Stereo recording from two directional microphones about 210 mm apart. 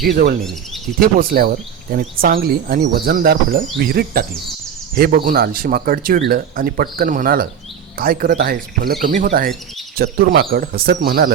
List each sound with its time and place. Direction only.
0.0 s speech: 50° right (ahead or behind)